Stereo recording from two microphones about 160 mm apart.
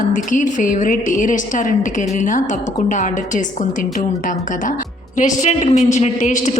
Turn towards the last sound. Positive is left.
turn(degrees=50)  # may be behind; listen again after turning